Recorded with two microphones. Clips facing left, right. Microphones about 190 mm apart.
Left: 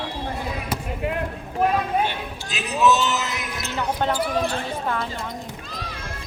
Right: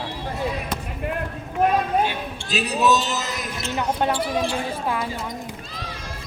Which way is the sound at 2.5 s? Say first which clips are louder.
Even; 35° right (ahead or behind).